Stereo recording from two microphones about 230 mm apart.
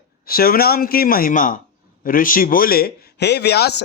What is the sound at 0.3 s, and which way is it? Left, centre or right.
A man's voice, left.